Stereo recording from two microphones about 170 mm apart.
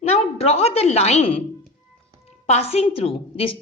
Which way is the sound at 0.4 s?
35° left (ahead or behind).